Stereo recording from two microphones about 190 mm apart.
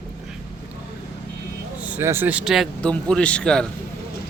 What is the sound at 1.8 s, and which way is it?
Speech, 10° right (ahead or behind).